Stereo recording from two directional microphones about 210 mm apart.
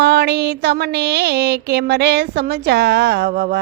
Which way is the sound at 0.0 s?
50° right (ahead or behind).